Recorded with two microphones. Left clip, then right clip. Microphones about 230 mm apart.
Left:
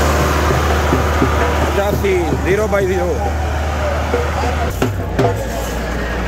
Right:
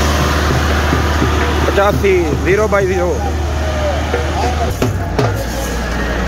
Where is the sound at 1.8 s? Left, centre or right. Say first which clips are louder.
Right 7 dB; centre.